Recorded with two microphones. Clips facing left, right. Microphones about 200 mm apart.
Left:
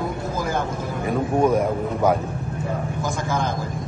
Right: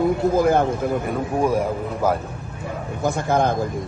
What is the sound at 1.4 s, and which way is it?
Speech, 10° right (ahead or behind).